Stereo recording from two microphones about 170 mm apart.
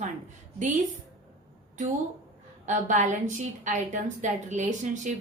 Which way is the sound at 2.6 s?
45° right (ahead or behind).